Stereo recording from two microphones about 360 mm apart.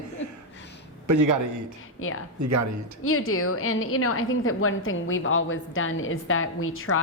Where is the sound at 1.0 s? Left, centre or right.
Right.